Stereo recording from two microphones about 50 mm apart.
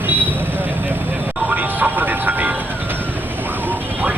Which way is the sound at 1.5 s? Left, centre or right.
Right.